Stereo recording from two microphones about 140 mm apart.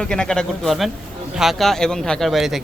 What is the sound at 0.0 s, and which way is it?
A man's voice, 5° left (ahead or behind).